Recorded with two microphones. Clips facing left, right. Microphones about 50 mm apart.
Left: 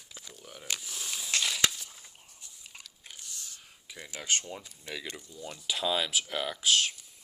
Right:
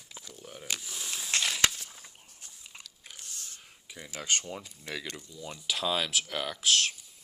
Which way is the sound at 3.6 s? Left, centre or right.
Centre.